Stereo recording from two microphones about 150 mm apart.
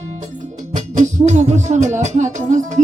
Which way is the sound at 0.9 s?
50° right (ahead or behind).